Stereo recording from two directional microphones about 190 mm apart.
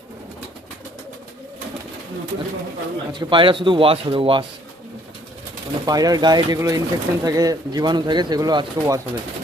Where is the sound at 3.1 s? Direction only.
25° right (ahead or behind).